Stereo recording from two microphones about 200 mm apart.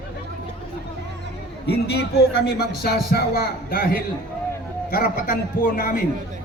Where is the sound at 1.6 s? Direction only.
55° left (ahead or behind).